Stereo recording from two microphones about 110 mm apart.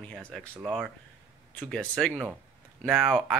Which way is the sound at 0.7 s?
10° right (ahead or behind).